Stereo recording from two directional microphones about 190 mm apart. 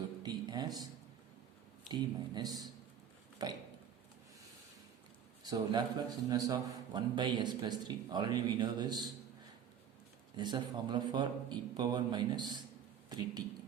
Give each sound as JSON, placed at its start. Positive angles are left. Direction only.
{"t": 0.2, "sound": "a sound", "side_deg": -20}
{"t": 1.9, "sound": "a man's voice", "side_deg": -20}
{"t": 5.4, "sound": "a man's voice", "side_deg": -20}
{"t": 10.3, "sound": "a man's voice", "side_deg": -25}